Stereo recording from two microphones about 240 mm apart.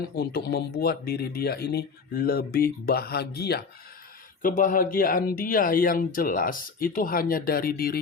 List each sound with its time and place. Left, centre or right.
0.2 s speech: left